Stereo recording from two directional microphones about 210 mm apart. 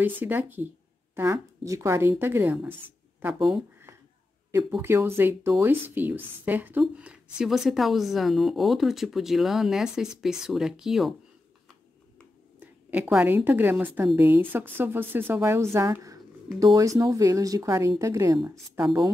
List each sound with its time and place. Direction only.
0.0 s a woman's voice: 10° right (ahead or behind)
12.5 s a woman's voice: 10° right (ahead or behind)